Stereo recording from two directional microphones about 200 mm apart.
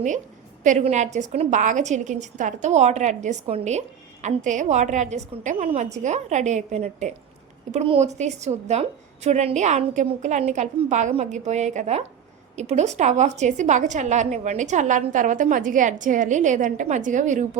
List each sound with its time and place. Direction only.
0.6 s a woman's voice: 35° right (ahead or behind)